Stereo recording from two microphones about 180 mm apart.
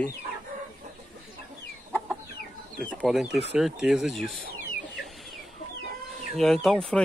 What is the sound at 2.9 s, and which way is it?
Speech, centre (ahead or behind).